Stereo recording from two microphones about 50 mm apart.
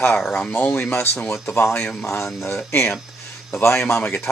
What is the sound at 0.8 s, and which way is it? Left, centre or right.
Speech, left.